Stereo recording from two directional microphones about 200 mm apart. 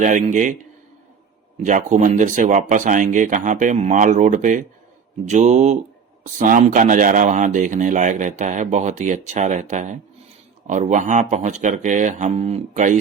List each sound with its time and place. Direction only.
0.0 s speech: 40° right (ahead or behind)
1.6 s speech: 35° right (ahead or behind)